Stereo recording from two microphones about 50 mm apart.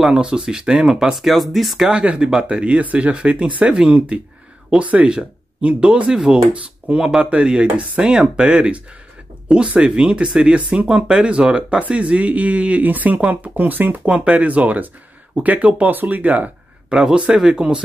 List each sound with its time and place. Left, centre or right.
0.0 s speech: centre
1.9 s speech: centre; by 14.0 s right
14.0 s speech: right
16.9 s speech: centre